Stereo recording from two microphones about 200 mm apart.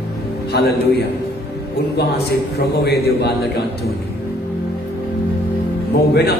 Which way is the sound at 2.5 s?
55° left (ahead or behind).